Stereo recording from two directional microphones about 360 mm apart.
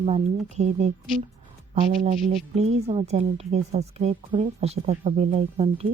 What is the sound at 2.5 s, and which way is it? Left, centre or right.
A woman's voice, centre.